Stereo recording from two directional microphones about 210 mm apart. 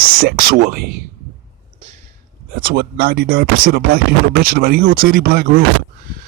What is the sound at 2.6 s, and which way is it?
Speech, 45° right (ahead or behind).